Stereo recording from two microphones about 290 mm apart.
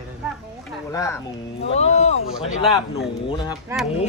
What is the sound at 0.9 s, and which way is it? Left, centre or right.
Speech, centre.